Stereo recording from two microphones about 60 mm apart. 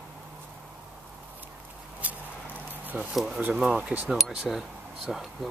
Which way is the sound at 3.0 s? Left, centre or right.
Centre.